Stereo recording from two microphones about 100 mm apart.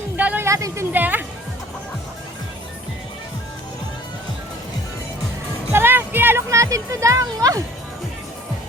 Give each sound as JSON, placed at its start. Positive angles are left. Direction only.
{"t": 0.2, "sound": "a sound", "side_deg": -15}
{"t": 0.4, "sound": "a woman's voice", "side_deg": -30}
{"t": 0.9, "sound": "music", "side_deg": -20}
{"t": 5.7, "sound": "music", "side_deg": -20}